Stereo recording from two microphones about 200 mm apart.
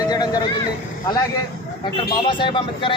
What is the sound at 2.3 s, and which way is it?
Speech, 25° left (ahead or behind).